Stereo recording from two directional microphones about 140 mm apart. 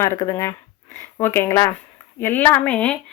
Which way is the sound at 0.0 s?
20° left (ahead or behind).